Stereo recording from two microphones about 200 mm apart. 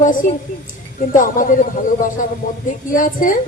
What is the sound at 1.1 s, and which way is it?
A woman's voice, 40° left (ahead or behind).